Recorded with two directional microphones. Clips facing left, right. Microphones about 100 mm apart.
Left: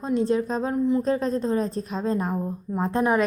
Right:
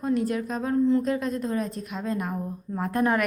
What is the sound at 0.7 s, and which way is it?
Speech, 15° left (ahead or behind).